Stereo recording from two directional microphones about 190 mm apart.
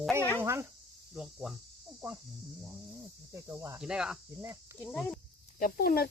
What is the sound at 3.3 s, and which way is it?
Cricket, 15° right (ahead or behind).